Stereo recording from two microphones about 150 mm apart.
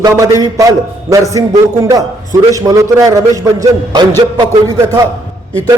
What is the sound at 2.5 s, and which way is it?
A man's voice, 20° right (ahead or behind).